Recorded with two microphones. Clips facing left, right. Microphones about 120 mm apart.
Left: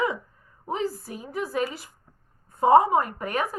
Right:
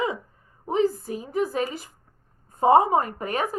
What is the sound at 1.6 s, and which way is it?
Speech, 45° right (ahead or behind).